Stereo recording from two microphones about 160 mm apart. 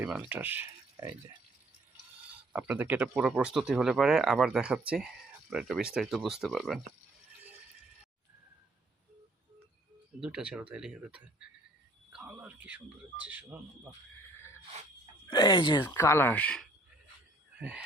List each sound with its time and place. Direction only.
0.0 s speech: 10° right (ahead or behind)
2.5 s speech: 10° right (ahead or behind)
10.2 s speech: 5° right (ahead or behind)
15.3 s speech: 30° left (ahead or behind)
15.8 s speech: 15° left (ahead or behind)
17.6 s speech: 10° right (ahead or behind)